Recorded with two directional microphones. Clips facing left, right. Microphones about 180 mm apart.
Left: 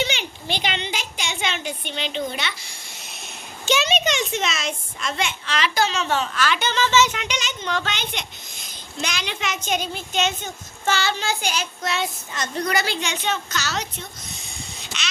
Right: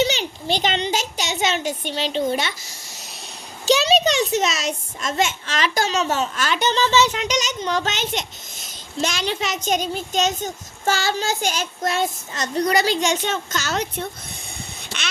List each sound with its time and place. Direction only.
0.0 s a child's voice: 40° right (ahead or behind); by 14.1 s 55° right (ahead or behind)